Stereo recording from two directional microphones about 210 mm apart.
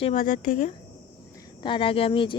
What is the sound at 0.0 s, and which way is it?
Speech, 35° left (ahead or behind).